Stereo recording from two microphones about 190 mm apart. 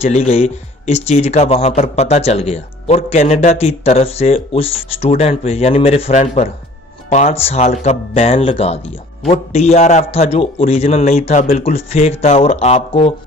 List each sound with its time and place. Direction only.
0.0 s speech: 35° left (ahead or behind)